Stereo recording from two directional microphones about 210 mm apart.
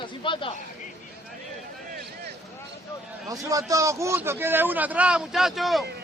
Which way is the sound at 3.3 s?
15° right (ahead or behind).